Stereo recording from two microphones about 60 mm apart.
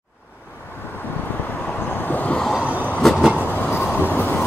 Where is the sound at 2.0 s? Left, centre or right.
Left.